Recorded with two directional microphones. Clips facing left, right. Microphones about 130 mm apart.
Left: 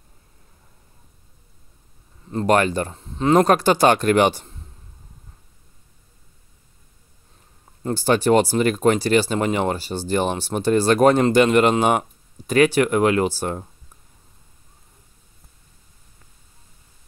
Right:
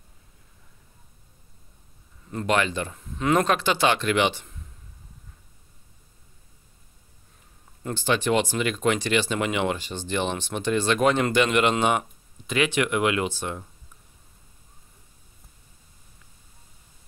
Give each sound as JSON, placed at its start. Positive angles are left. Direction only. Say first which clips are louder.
{"t": 2.2, "sound": "speech", "louder": "left 6 dB", "side_deg": 35}
{"t": 2.9, "sound": "speech", "louder": "left 6 dB", "side_deg": 30}
{"t": 7.8, "sound": "speech", "louder": "left 6 dB", "side_deg": 40}